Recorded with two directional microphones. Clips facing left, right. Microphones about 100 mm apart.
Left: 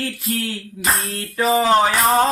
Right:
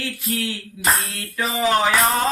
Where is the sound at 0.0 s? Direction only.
40° left (ahead or behind).